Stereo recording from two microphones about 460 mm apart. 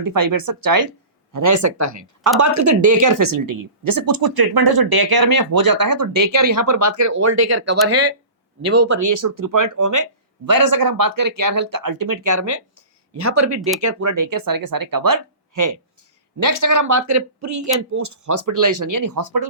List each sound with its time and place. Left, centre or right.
0.0 s a woman's voice: right
13.6 s speech: centre
13.8 s a woman's voice: right